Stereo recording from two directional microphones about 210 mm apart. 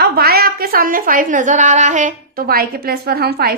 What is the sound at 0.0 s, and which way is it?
A woman's voice, 45° right (ahead or behind).